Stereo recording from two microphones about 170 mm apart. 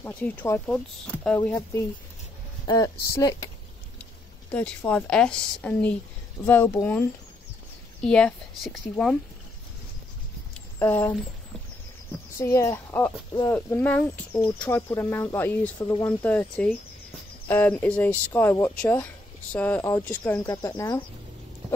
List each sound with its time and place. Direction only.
0.0 s speech: 10° left (ahead or behind)
4.5 s a woman's voice: 10° left (ahead or behind)
10.8 s speech: 10° left (ahead or behind)
12.4 s speech: 20° left (ahead or behind)